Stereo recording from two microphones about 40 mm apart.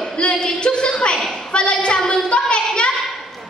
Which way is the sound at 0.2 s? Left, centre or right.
Left.